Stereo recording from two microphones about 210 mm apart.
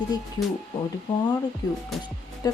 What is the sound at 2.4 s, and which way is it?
Speech, 20° left (ahead or behind).